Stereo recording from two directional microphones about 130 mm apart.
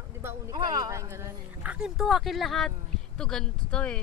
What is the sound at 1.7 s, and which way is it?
Speech, 5° right (ahead or behind).